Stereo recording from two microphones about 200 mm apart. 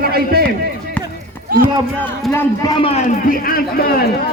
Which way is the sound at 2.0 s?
5° left (ahead or behind).